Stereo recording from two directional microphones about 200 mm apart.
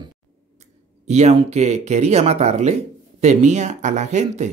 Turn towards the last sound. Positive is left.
turn(degrees=-35)  # may be behind; listen again after turning